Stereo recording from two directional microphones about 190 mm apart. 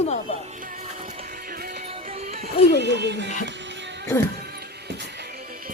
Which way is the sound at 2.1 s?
35° right (ahead or behind).